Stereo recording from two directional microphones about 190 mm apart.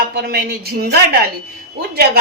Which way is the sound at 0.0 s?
55° right (ahead or behind).